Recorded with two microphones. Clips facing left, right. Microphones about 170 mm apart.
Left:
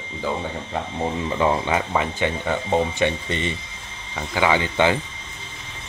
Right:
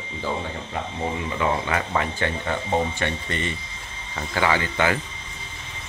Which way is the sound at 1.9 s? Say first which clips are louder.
Left 2 dB; 15° left (ahead or behind).